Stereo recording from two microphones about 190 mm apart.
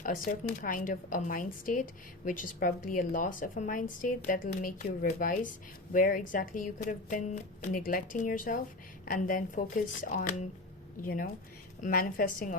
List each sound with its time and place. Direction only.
0.0 s a woman's voice: 45° left (ahead or behind)